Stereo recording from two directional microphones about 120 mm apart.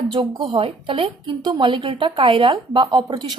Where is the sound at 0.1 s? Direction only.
40° right (ahead or behind).